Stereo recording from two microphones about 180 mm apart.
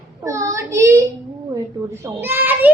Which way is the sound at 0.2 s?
20° right (ahead or behind).